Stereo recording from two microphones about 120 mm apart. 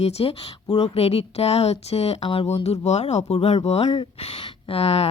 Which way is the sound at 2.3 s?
50° left (ahead or behind).